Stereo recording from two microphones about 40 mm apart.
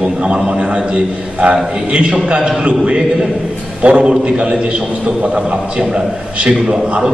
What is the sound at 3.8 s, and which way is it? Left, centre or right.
Speech, right.